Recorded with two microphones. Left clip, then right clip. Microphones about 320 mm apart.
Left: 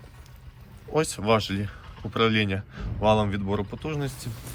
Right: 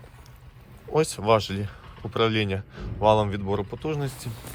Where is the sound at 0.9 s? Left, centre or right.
Centre.